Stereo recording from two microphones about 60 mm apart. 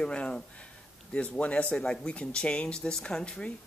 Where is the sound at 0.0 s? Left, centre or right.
Centre.